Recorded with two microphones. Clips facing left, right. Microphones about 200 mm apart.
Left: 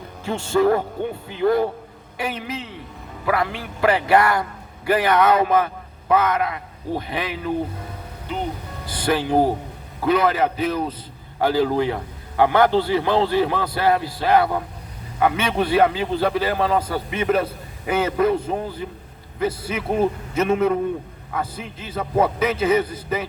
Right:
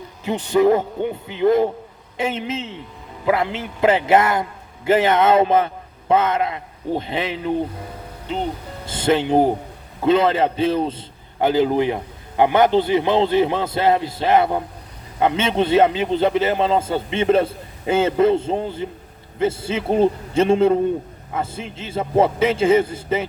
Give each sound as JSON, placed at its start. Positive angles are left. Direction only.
{"t": 0.3, "sound": "a man's voice", "side_deg": -20}
{"t": 8.9, "sound": "a man's voice", "side_deg": -25}